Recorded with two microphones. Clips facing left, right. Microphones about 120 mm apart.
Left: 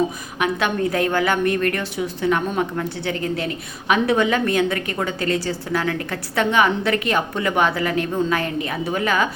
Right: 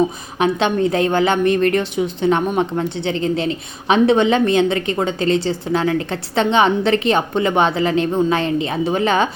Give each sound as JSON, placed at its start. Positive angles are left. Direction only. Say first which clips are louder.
{"t": 0.3, "sound": "a woman's voice", "louder": "right 5 dB", "side_deg": -25}